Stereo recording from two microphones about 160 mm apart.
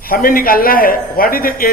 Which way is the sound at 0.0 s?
65° left (ahead or behind).